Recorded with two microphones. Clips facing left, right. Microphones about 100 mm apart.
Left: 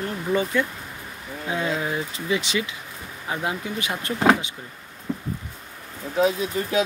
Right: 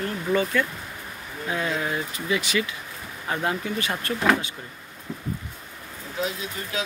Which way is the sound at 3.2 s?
10° left (ahead or behind).